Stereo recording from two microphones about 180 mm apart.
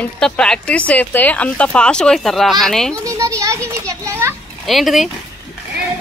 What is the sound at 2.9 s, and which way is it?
Children playing, 15° right (ahead or behind).